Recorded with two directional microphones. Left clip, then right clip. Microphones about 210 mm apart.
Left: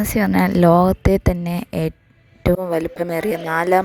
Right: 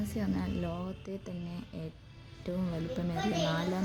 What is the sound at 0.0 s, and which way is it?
A woman's voice, 50° left (ahead or behind).